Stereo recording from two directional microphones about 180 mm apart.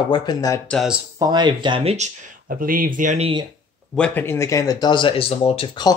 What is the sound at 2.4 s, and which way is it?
Speech, 50° right (ahead or behind).